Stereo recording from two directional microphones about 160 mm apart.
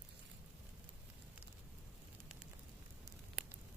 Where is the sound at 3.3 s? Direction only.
10° right (ahead or behind).